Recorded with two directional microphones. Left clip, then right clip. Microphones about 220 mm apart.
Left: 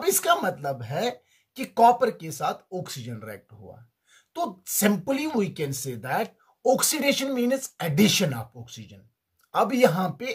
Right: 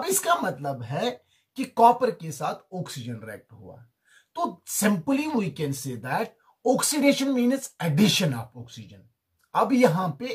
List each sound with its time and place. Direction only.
0.0 s speech: 45° left (ahead or behind)